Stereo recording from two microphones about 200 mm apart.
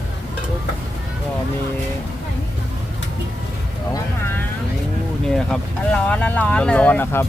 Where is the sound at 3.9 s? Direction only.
10° left (ahead or behind).